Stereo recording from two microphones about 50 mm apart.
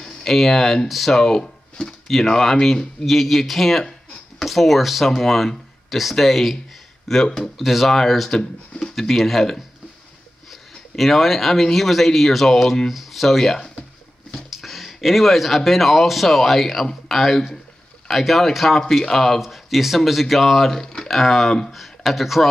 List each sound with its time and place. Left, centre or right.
0.0 s speech: centre
1.2 s speech: centre
9.0 s speech: centre